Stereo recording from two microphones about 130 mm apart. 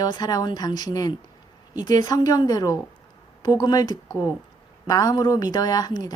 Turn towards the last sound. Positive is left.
turn(degrees=30)  # may be behind; listen again after turning